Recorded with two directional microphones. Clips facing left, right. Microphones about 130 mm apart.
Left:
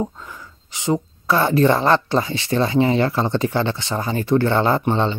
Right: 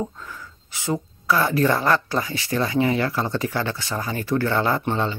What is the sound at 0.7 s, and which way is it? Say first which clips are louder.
Speech: left 5 dB; 20° left (ahead or behind).